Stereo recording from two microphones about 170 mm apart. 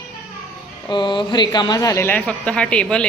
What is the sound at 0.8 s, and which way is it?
Speech, 25° left (ahead or behind).